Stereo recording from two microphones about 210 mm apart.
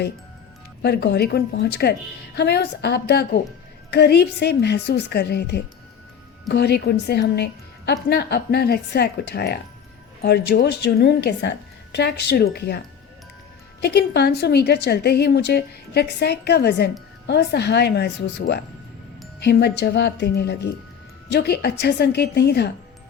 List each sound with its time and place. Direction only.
0.8 s a woman's voice: 50° left (ahead or behind)
13.8 s a woman's voice: 50° left (ahead or behind)